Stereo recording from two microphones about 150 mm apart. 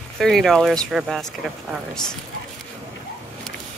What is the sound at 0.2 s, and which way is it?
Speech, centre (ahead or behind).